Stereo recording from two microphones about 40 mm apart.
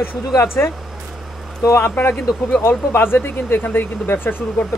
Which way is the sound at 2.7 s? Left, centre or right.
Left.